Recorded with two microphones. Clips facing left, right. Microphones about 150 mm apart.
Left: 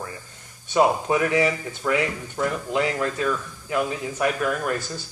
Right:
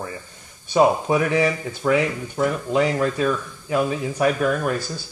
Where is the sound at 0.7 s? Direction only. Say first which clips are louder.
Right 2 dB; 15° right (ahead or behind).